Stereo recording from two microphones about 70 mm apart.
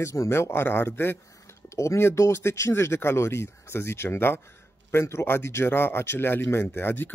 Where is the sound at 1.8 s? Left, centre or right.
Left.